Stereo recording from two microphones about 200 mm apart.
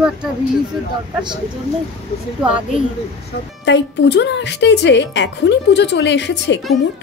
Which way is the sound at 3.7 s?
60° left (ahead or behind).